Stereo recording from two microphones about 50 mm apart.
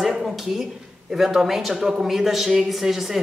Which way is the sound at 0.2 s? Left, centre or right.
Centre.